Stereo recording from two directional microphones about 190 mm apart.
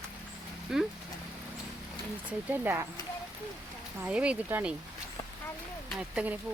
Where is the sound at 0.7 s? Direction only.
Centre (ahead or behind).